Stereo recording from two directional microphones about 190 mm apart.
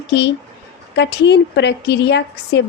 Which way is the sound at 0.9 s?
65° left (ahead or behind).